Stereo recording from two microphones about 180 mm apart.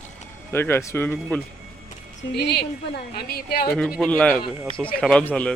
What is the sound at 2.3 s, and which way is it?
A woman's voice, 65° left (ahead or behind).